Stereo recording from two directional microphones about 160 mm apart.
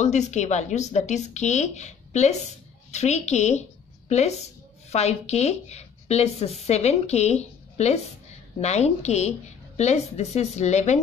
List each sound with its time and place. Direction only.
0.0 s speech: 45° left (ahead or behind)